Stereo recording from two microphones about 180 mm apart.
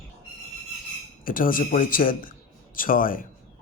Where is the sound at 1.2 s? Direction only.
50° left (ahead or behind).